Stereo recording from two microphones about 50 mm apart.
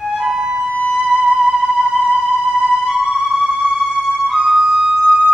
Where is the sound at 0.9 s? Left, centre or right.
Centre.